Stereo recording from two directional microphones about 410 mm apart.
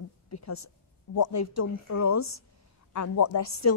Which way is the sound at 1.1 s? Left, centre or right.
Left.